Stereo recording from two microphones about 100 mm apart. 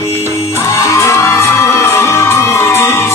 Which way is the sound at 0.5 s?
25° left (ahead or behind).